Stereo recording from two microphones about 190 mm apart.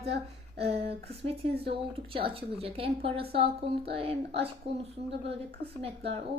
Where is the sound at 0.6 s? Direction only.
30° right (ahead or behind).